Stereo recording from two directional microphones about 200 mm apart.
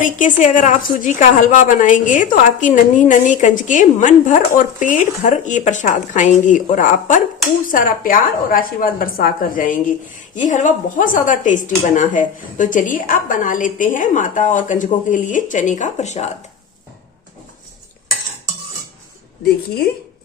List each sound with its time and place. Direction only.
0.0 s a woman's voice: 40° left (ahead or behind)
19.5 s a woman's voice: 50° left (ahead or behind)